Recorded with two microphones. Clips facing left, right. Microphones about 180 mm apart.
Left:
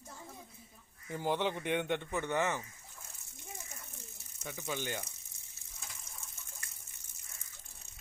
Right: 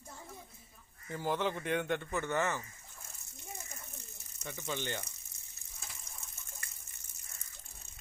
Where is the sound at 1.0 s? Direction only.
15° left (ahead or behind).